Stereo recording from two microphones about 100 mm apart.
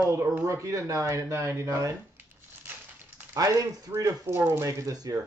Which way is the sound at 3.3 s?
40° right (ahead or behind).